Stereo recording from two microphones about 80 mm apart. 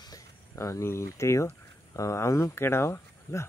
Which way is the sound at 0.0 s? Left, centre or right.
Left.